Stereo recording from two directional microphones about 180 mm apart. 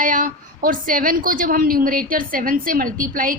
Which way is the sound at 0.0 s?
50° right (ahead or behind).